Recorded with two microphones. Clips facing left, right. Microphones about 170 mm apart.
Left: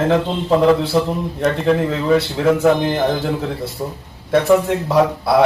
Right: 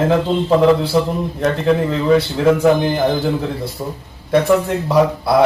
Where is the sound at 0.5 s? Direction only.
Centre (ahead or behind).